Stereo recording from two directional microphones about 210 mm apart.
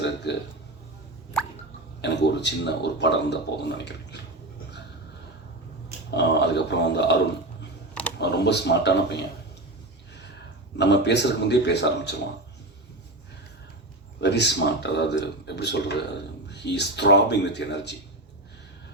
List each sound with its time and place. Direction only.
0.3 s a man's voice: 55° left (ahead or behind)
2.0 s speech: 55° left (ahead or behind)
6.1 s speech: 55° left (ahead or behind)
8.2 s a man's voice: 55° left (ahead or behind)
10.8 s speech: 55° left (ahead or behind)
14.2 s a man's voice: 55° left (ahead or behind)